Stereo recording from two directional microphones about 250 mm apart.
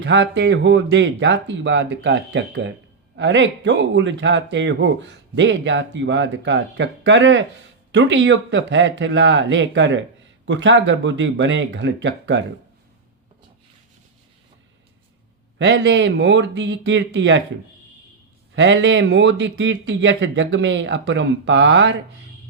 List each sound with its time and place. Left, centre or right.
0.0 s speech: right
15.5 s speech: right
18.5 s speech: right